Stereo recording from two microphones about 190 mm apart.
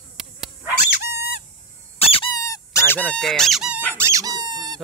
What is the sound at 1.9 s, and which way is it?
Squeak, 30° left (ahead or behind).